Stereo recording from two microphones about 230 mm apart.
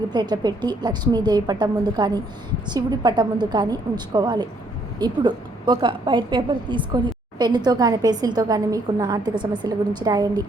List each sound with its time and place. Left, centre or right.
0.1 s a woman's voice: centre